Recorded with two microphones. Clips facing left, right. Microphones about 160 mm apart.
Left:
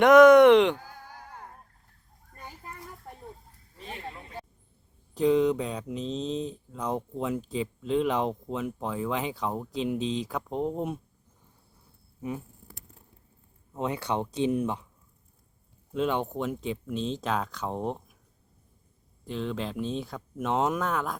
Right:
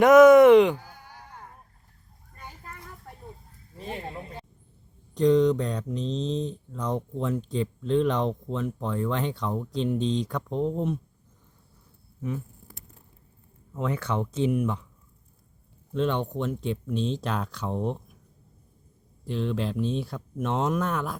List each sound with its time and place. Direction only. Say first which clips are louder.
0.0 s speech: right 1 dB; centre (ahead or behind)
3.8 s a sound: right 5 dB; 30° right (ahead or behind)
5.1 s speech: right 3 dB; 5° left (ahead or behind)
13.7 s speech: right 1 dB; 15° left (ahead or behind)
15.9 s speech: right 1 dB; 5° left (ahead or behind)
19.2 s speech: right 3 dB; centre (ahead or behind)